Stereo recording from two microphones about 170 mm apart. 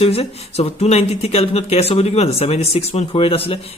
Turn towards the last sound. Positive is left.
turn(degrees=35)  # may be behind; listen again after turning